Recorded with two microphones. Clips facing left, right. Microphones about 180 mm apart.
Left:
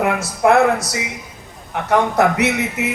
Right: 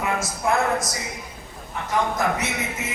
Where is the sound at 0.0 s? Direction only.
65° left (ahead or behind).